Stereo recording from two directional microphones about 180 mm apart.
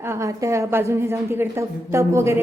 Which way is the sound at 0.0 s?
15° right (ahead or behind).